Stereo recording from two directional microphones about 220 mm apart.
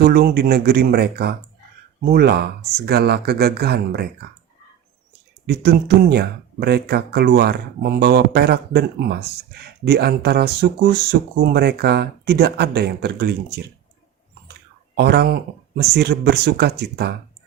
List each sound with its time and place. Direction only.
0.0 s speech: 45° right (ahead or behind)
5.5 s speech: 45° right (ahead or behind)
14.9 s speech: 50° right (ahead or behind)